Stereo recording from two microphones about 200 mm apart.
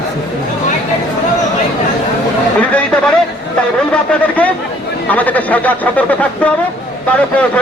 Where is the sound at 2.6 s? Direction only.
5° left (ahead or behind).